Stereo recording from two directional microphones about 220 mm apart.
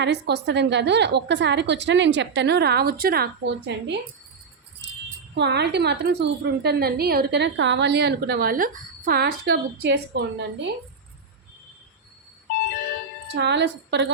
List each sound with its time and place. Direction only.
0.0 s a woman's voice: 50° right (ahead or behind)
4.8 s jingle bell: 50° right (ahead or behind)
5.4 s a woman's voice: 50° right (ahead or behind)
13.3 s a woman's voice: 50° right (ahead or behind)